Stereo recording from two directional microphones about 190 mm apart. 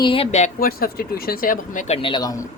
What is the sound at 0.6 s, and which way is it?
Speech, 50° left (ahead or behind).